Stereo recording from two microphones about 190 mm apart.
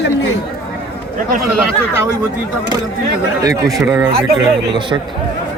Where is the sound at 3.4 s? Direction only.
20° right (ahead or behind).